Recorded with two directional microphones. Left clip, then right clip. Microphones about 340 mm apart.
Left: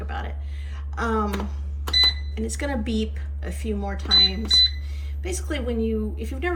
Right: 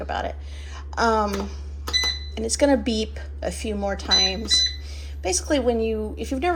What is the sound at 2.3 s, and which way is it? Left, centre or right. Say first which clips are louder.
A woman's voice: right 9 dB; centre.